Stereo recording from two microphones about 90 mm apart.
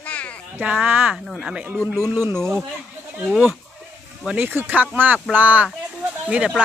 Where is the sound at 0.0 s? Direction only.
15° left (ahead or behind).